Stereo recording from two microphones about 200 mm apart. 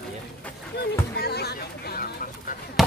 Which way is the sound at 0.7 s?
55° left (ahead or behind).